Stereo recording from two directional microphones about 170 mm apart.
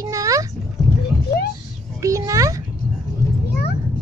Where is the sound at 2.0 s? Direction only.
20° right (ahead or behind).